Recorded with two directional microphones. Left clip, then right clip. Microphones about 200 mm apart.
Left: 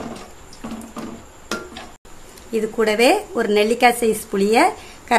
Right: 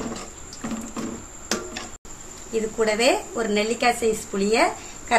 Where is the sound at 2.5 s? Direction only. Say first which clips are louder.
Left 4 dB; 50° left (ahead or behind).